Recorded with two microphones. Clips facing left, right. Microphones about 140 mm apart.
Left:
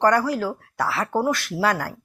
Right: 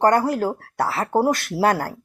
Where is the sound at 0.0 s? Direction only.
50° right (ahead or behind).